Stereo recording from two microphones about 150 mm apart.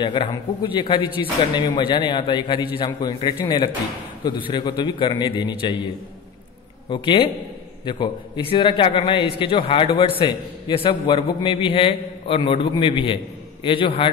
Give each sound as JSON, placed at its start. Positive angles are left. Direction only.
{"t": 0.0, "sound": "a man's voice", "side_deg": 30}
{"t": 6.9, "sound": "a man's voice", "side_deg": 35}